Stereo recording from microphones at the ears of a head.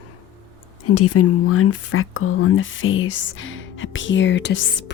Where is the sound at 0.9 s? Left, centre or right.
Left.